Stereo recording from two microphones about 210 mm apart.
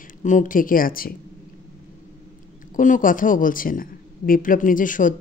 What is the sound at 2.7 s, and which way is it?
A man's voice, 40° left (ahead or behind).